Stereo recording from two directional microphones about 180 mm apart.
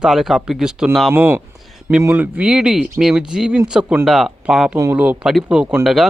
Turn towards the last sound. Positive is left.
turn(degrees=0)  # may be behind; listen again after turning